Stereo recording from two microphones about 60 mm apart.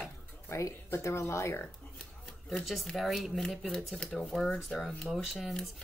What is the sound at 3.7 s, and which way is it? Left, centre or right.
Speech, centre.